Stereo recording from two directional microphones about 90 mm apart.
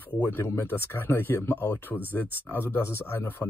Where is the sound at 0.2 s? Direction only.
25° left (ahead or behind).